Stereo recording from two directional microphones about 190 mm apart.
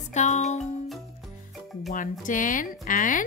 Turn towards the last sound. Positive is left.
turn(degrees=45)  # may be behind; listen again after turning